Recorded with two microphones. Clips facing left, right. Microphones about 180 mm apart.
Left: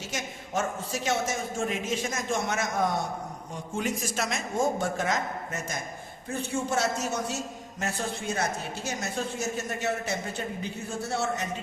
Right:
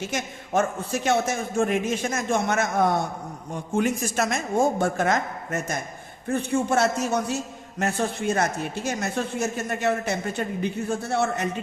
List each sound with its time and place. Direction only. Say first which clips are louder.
0.0 s a man's voice: right 6 dB; 55° right (ahead or behind)